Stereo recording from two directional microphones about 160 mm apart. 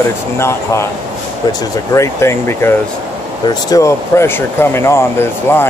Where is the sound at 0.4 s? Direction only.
15° left (ahead or behind).